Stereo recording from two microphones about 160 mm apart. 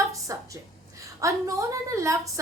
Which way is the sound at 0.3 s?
20° right (ahead or behind).